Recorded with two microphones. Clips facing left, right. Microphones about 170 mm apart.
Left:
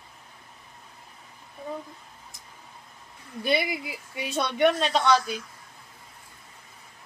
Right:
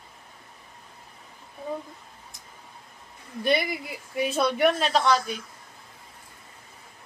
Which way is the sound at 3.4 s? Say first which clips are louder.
Right 1 dB; centre (ahead or behind).